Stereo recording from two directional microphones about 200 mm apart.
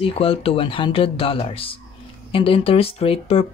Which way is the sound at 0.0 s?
30° left (ahead or behind).